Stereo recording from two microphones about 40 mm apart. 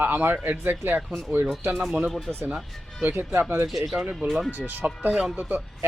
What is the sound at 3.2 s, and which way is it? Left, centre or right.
Speech, right.